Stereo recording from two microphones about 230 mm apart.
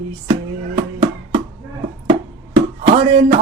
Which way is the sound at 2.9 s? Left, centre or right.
Right.